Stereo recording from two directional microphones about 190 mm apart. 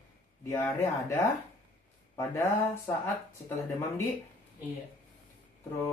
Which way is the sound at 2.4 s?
15° left (ahead or behind).